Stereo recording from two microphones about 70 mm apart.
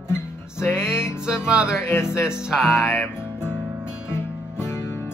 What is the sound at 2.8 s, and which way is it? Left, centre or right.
Music, left.